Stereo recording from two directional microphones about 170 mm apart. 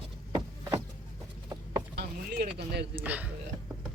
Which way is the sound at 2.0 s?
70° right (ahead or behind).